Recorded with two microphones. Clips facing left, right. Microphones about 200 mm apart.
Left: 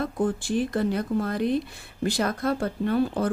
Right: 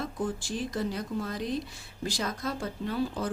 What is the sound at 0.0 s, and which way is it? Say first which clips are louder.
Speech: left 7 dB; 55° left (ahead or behind).